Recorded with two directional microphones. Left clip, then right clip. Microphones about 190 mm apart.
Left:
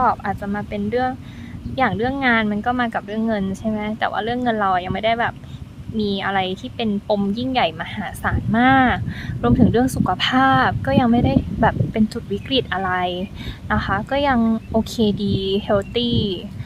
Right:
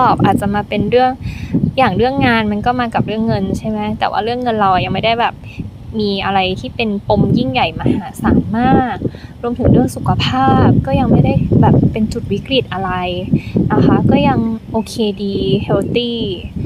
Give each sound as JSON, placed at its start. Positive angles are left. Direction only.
{"t": 0.0, "sound": "speech", "side_deg": -25}
{"t": 14.9, "sound": "speech", "side_deg": -5}